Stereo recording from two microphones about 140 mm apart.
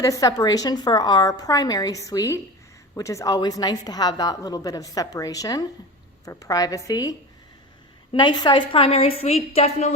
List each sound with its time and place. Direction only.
0.0 s a woman's voice: 25° left (ahead or behind); by 9.9 s 45° left (ahead or behind)